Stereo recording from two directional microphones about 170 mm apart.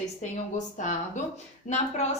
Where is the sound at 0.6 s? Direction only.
50° left (ahead or behind).